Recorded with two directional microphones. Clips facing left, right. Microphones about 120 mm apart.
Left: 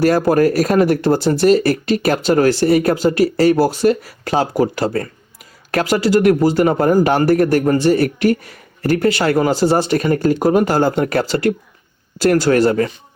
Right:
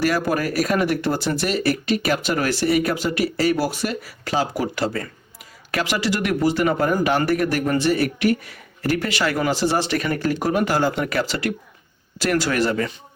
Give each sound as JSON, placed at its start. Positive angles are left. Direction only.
{"t": 0.0, "sound": "speech", "side_deg": 40}